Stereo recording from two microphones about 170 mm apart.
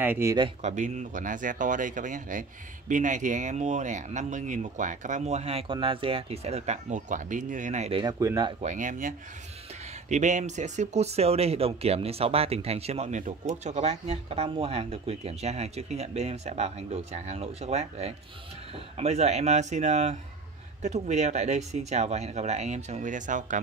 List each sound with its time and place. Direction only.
0.0 s speech: 15° right (ahead or behind)
0.6 s speech: 45° right (ahead or behind)
8.0 s speech: 20° right (ahead or behind)
8.5 s speech: 45° right (ahead or behind)